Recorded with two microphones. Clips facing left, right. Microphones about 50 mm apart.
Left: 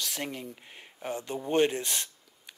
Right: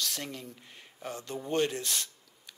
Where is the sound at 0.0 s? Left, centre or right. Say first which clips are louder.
Left 2 dB; centre.